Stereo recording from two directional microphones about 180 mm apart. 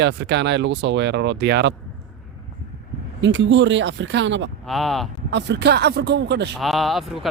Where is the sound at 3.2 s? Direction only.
90° right.